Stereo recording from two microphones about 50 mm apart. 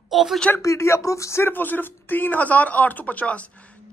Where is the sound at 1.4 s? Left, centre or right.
Left.